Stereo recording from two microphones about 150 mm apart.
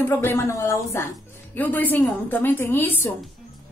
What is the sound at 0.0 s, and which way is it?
A woman's voice, 15° left (ahead or behind).